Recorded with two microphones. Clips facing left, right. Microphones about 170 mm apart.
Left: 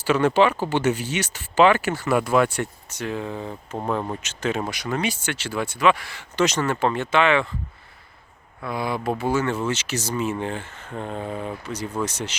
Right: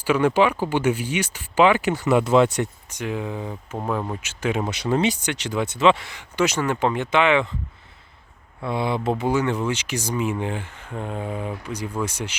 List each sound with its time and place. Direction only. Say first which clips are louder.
0.0 s speech: even; 10° right (ahead or behind)
3.8 s speech: even; centre (ahead or behind)
4.2 s speech: right 1 dB; 10° right (ahead or behind)
4.7 s speech: right 5 dB; 25° right (ahead or behind)
8.6 s speech: right 2 dB; 25° right (ahead or behind)